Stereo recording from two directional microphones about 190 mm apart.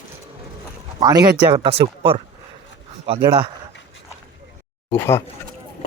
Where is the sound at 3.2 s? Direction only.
25° right (ahead or behind).